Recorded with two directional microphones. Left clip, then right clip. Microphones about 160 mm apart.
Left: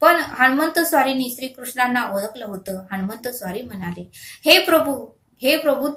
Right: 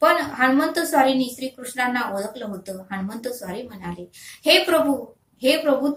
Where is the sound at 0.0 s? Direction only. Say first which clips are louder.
Left 3 dB; 25° left (ahead or behind).